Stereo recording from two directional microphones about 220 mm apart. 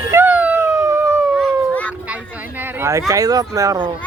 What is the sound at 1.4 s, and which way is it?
Howl, 5° left (ahead or behind).